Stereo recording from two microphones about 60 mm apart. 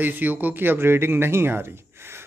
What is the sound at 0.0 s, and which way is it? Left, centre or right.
Speech, right.